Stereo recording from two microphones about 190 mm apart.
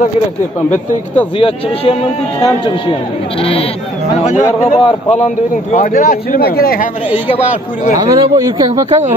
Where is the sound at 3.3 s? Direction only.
30° left (ahead or behind).